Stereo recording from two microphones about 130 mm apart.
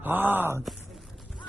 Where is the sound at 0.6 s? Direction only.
Centre (ahead or behind).